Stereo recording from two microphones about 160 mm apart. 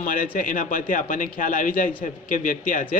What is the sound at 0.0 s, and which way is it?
Speech, 60° left (ahead or behind).